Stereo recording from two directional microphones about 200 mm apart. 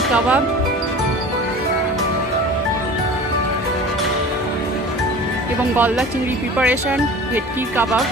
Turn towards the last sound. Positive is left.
turn(degrees=-5)  # may be behind; listen again after turning